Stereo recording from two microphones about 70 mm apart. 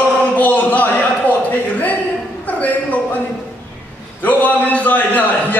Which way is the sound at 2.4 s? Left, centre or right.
Left.